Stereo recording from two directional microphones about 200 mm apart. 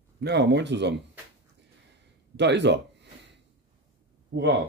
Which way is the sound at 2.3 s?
60° right (ahead or behind).